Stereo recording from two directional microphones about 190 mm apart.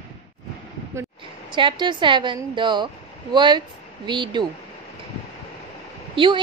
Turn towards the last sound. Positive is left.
turn(degrees=-25)  # may be behind; listen again after turning